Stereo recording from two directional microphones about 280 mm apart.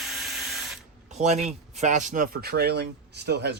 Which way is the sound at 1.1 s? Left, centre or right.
Right.